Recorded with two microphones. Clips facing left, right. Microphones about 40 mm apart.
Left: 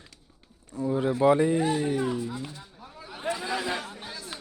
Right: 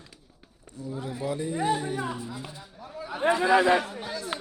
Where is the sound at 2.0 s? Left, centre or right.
Centre.